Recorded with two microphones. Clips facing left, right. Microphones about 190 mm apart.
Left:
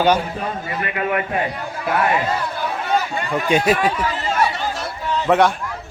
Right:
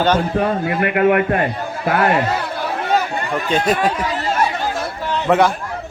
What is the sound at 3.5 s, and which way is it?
Speech, 10° left (ahead or behind).